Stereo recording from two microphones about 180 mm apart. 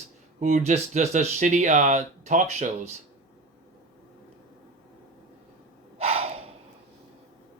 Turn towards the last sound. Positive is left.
turn(degrees=-35)  # may be behind; listen again after turning